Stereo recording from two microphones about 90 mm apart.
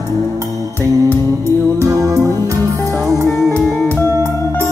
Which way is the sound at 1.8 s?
35° right (ahead or behind).